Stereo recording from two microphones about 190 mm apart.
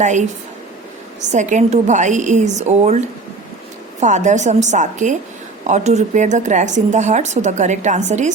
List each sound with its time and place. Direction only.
0.0 s a woman's voice: 40° right (ahead or behind)
4.0 s a woman's voice: 40° right (ahead or behind)